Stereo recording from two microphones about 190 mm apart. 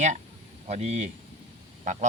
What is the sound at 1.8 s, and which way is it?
Goose, 40° right (ahead or behind).